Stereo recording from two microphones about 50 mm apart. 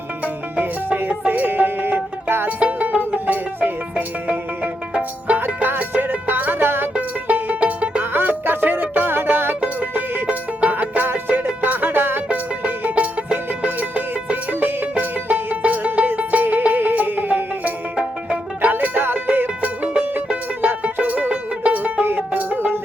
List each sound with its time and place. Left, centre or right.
0.6 s music: right
2.6 s music: right
5.6 s music: right
8.1 s music: right
9.8 s music: right
12.3 s music: right
20.1 s music: right
20.8 s music: right